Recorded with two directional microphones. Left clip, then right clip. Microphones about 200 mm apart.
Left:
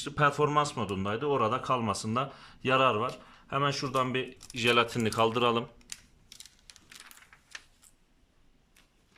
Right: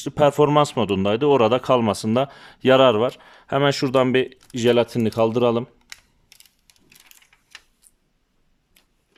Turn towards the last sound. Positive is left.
turn(degrees=-20)  # may be behind; listen again after turning